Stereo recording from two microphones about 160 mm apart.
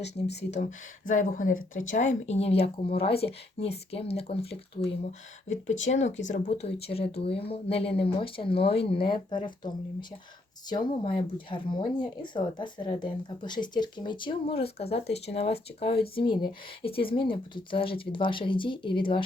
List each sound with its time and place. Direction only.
0.0 s speech: 90° left
1.0 s speech: 55° left (ahead or behind); by 4.4 s 40° left (ahead or behind)
5.5 s speech: 45° left (ahead or behind)
17.1 s speech: 65° left (ahead or behind)
17.3 s speech: 30° left (ahead or behind)